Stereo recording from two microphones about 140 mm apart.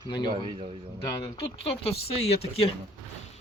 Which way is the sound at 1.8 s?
45° left (ahead or behind).